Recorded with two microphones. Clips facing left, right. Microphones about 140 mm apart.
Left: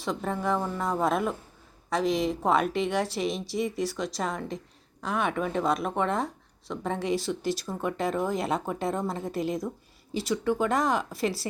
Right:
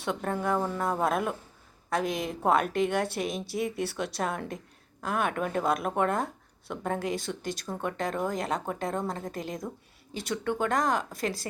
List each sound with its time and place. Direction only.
0.0 s a woman's voice: centre (ahead or behind)
3.2 s speech: 50° right (ahead or behind)
3.8 s a woman's voice: 5° right (ahead or behind)